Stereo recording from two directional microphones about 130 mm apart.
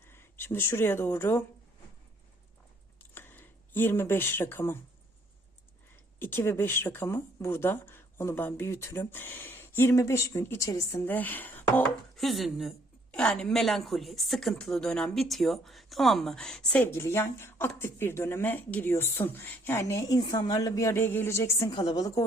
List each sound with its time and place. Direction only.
0.1 s speech: 15° left (ahead or behind)
3.2 s speech: 15° left (ahead or behind)
6.1 s a woman's voice: 15° left (ahead or behind)
12.1 s a woman's voice: centre (ahead or behind); by 21.7 s 20° left (ahead or behind)
21.7 s a woman's voice: 35° left (ahead or behind)